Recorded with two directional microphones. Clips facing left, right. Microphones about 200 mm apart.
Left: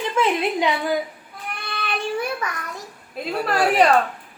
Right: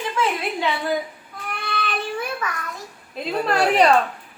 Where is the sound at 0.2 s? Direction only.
15° left (ahead or behind).